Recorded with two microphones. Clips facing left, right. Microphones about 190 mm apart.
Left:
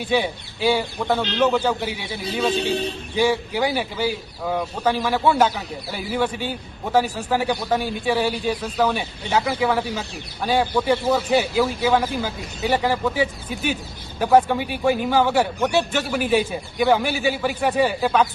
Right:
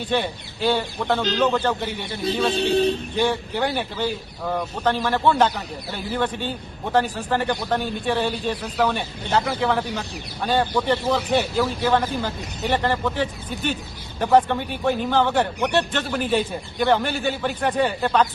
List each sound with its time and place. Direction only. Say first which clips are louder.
0.1 s speech: left 3 dB; 10° left (ahead or behind)